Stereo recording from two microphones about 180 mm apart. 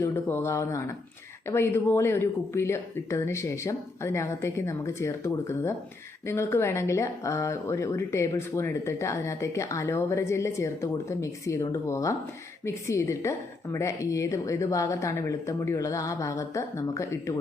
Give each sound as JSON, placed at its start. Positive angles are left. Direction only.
{"t": 0.0, "sound": "speech", "side_deg": 15}